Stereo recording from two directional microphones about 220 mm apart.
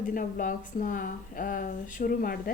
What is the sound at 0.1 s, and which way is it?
A woman's voice, 35° left (ahead or behind).